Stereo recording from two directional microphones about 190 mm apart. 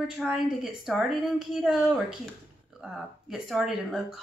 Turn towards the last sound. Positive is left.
turn(degrees=0)  # may be behind; listen again after turning